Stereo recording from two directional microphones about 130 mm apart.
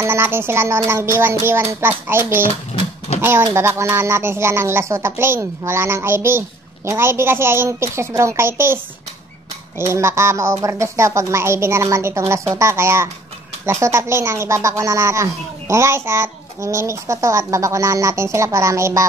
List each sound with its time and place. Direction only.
0.0 s speech: 20° right (ahead or behind)
9.8 s speech: 20° right (ahead or behind)